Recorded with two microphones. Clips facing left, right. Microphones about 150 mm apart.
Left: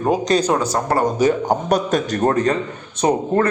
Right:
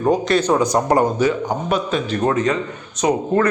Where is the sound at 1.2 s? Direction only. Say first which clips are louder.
Left 2 dB; 40° left (ahead or behind).